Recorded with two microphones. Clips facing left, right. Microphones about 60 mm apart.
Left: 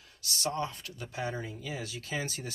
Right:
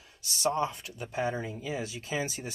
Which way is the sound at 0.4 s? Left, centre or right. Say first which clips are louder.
Right 5 dB; centre.